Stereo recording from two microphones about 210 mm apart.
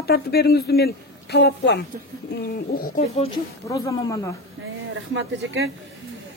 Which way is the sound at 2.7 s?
40° left (ahead or behind).